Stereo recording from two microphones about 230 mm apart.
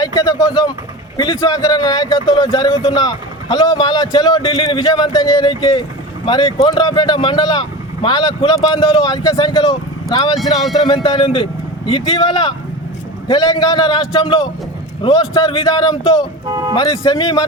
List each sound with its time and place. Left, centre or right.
0.0 s a man's voice: centre